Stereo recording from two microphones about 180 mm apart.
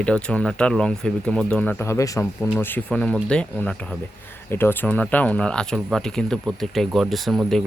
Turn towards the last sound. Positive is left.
turn(degrees=0)  # may be behind; listen again after turning